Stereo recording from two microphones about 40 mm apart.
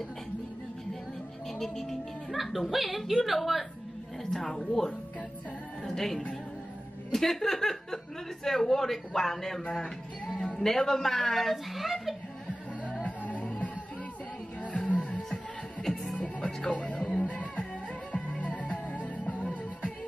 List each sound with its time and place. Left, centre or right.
1.6 s a woman's voice: centre
4.3 s a woman's voice: centre
13.0 s music: left
15.8 s music: centre
16.3 s music: left